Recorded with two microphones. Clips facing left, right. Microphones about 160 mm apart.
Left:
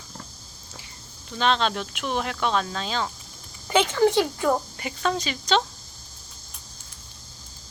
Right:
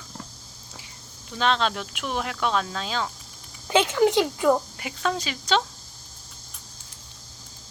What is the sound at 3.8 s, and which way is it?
A woman's voice, 15° right (ahead or behind).